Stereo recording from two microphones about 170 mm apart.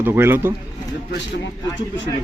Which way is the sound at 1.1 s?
90° left.